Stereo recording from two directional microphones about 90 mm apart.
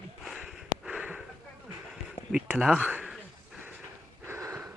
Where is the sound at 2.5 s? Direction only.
Centre (ahead or behind).